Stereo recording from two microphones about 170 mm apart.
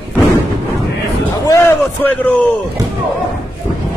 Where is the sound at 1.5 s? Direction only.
15° left (ahead or behind).